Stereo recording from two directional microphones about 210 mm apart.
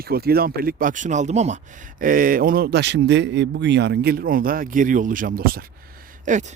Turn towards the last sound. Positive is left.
turn(degrees=-35)  # may be behind; listen again after turning